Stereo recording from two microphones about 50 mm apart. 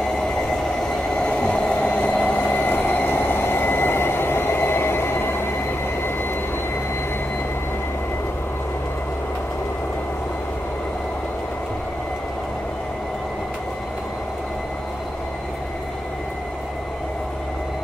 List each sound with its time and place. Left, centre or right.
0.7 s train: centre; by 5.4 s left